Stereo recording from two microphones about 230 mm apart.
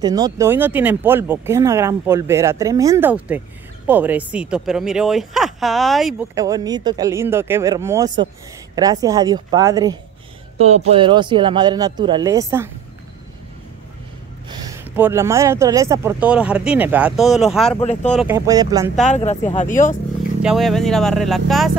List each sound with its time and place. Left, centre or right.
0.0 s speech: centre
6.3 s speech: centre
10.6 s speech: right
14.5 s speech: centre
17.7 s speech: left
18.2 s speech: centre
18.9 s speech: left
20.4 s speech: centre